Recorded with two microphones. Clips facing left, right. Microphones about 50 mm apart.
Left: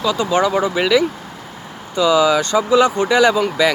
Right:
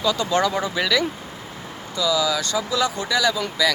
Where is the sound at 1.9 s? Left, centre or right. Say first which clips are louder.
Left 8 dB; left.